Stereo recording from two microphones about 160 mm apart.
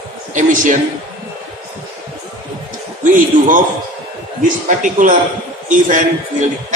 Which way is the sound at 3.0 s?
55° right (ahead or behind).